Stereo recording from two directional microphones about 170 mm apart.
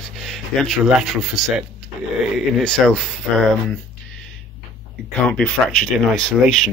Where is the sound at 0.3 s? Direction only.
Centre (ahead or behind).